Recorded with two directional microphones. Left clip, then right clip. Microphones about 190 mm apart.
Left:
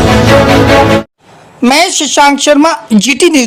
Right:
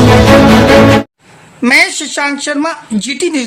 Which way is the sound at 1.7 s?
20° left (ahead or behind).